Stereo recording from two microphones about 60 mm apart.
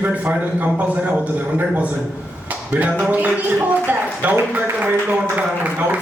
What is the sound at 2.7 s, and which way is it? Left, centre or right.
Speech, right.